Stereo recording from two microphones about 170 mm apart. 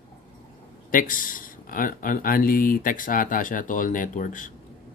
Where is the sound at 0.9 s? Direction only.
55° left (ahead or behind).